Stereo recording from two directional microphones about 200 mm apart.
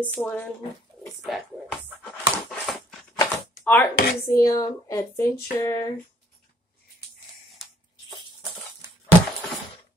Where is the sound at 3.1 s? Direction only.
10° left (ahead or behind).